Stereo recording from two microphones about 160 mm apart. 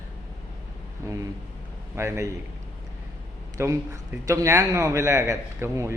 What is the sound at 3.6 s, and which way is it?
A man's voice, 20° right (ahead or behind).